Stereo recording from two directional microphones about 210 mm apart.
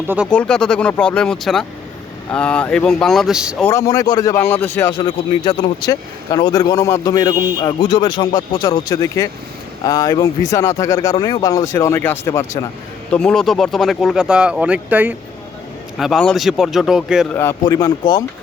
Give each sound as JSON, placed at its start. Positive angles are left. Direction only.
{"t": 0.3, "sound": "speech", "side_deg": 5}
{"t": 3.6, "sound": "a man's voice", "side_deg": 10}
{"t": 17.3, "sound": "a man's voice", "side_deg": 10}